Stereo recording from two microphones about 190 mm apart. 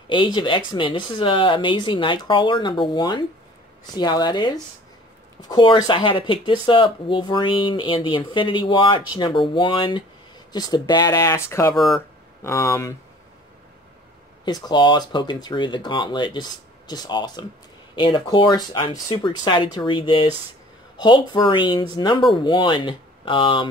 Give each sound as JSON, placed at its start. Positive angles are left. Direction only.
{"t": 0.1, "sound": "speech", "side_deg": 25}
{"t": 11.7, "sound": "speech", "side_deg": 0}
{"t": 12.4, "sound": "speech", "side_deg": 15}
{"t": 14.4, "sound": "speech", "side_deg": 25}